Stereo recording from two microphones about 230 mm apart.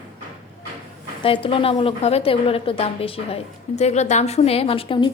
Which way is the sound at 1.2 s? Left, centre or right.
Left.